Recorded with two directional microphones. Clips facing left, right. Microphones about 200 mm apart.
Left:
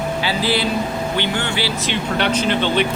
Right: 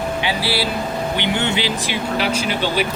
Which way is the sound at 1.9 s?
5° right (ahead or behind).